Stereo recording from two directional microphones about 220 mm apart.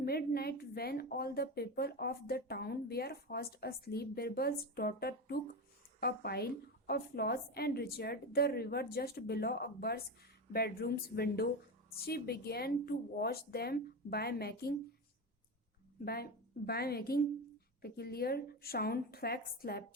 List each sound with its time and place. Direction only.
0.0 s a woman's voice: 45° left (ahead or behind)
16.0 s a woman's voice: 45° left (ahead or behind)